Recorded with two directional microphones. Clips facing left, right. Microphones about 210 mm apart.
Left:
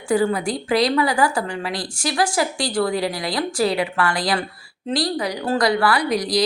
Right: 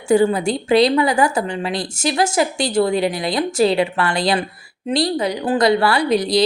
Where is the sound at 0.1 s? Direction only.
25° right (ahead or behind).